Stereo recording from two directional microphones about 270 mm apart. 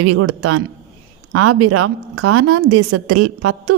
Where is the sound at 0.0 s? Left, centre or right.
Right.